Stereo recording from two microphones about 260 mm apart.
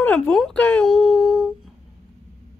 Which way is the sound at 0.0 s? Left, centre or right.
Centre.